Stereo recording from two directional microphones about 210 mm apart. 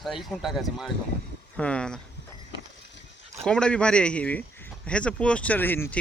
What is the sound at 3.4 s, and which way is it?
Speech, 5° left (ahead or behind).